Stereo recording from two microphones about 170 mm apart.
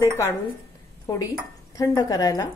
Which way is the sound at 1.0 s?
20° left (ahead or behind).